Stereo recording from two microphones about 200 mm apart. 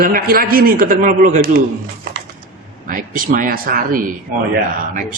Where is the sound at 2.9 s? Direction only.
45° right (ahead or behind).